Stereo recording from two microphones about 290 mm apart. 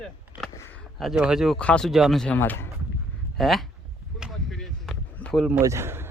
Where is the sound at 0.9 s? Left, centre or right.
Centre.